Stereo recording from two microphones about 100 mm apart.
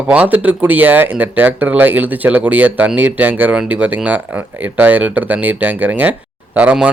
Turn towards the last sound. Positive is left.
turn(degrees=-15)  # may be behind; listen again after turning